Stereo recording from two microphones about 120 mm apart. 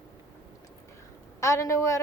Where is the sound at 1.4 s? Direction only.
25° left (ahead or behind).